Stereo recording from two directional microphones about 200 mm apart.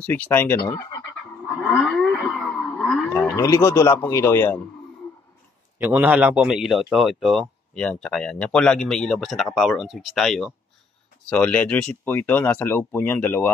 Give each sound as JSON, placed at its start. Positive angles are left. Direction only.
{"t": 0.0, "sound": "speech", "side_deg": 10}
{"t": 0.7, "sound": "frog", "side_deg": 20}
{"t": 1.4, "sound": "livestock", "side_deg": -5}
{"t": 1.7, "sound": "a sound", "side_deg": 5}
{"t": 3.3, "sound": "speech", "side_deg": 15}
{"t": 5.8, "sound": "a man's voice", "side_deg": -10}